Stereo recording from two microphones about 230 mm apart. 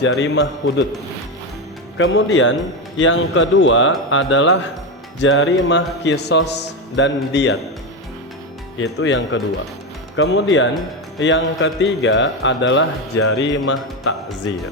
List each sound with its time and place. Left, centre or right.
0.0 s speech: left
2.0 s speech: left
8.8 s speech: left